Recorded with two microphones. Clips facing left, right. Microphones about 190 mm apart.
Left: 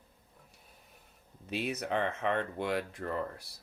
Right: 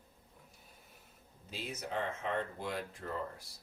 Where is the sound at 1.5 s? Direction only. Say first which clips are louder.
Left 7 dB; 70° left (ahead or behind).